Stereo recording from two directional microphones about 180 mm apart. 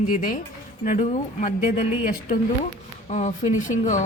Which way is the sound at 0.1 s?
50° left (ahead or behind).